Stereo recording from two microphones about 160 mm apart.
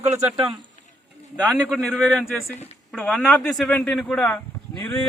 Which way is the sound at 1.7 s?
5° left (ahead or behind).